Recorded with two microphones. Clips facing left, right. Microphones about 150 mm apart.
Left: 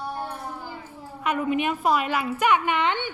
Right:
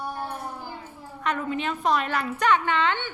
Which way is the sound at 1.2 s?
10° left (ahead or behind).